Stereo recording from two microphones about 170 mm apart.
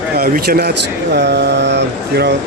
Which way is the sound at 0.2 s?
65° right (ahead or behind).